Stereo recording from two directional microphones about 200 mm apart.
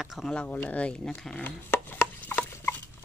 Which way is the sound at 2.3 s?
10° left (ahead or behind).